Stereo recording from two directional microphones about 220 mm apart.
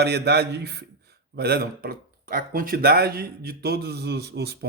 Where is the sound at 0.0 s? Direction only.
50° right (ahead or behind).